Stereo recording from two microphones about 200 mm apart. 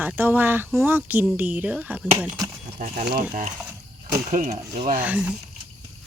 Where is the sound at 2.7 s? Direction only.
50° right (ahead or behind).